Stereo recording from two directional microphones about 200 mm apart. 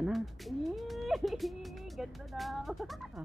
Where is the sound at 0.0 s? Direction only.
Centre (ahead or behind).